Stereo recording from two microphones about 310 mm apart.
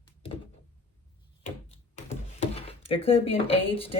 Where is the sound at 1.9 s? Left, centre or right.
Centre.